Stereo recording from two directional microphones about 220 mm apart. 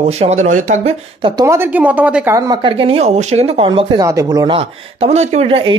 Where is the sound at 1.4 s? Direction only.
10° right (ahead or behind).